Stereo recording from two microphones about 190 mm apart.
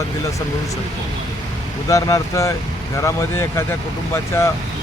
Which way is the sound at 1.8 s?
15° left (ahead or behind).